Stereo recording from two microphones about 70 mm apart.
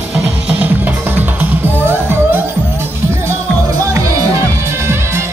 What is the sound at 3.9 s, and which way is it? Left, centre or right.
Music, right.